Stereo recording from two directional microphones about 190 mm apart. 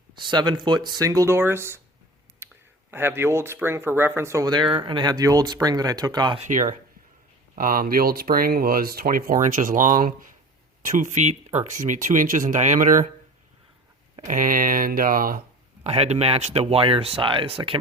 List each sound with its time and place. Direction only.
0.1 s speech: 25° right (ahead or behind)
2.4 s clicking: 10° right (ahead or behind)
2.9 s speech: 10° right (ahead or behind)
6.4 s speech: 40° right (ahead or behind)
14.3 s speech: 45° right (ahead or behind)
15.8 s speech: 35° right (ahead or behind)